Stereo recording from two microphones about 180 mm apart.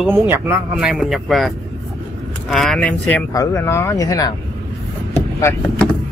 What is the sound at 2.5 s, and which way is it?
Speech, centre (ahead or behind).